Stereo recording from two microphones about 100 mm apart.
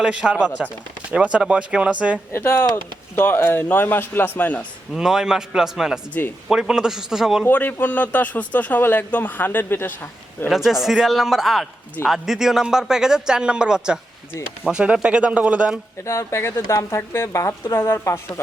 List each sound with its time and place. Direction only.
0.0 s speech: 10° right (ahead or behind)
2.3 s speech: 20° left (ahead or behind)
4.9 s a man's voice: 5° right (ahead or behind)
7.4 s a man's voice: 20° left (ahead or behind)
10.5 s a man's voice: 5° right (ahead or behind)
16.0 s speech: 25° left (ahead or behind)